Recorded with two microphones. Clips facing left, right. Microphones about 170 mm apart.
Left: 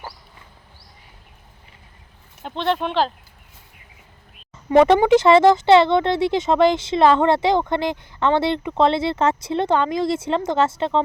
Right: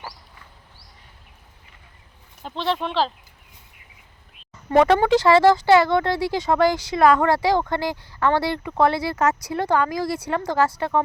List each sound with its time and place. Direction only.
2.4 s speech: centre (ahead or behind)
4.8 s speech: 15° left (ahead or behind)